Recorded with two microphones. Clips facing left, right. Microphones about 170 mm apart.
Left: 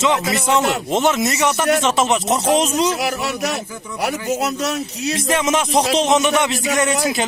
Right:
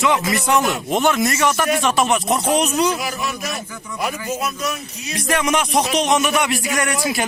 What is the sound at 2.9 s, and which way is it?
Speech, 70° left (ahead or behind).